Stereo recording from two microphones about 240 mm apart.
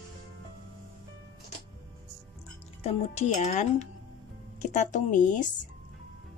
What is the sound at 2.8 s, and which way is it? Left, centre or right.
Speech, left.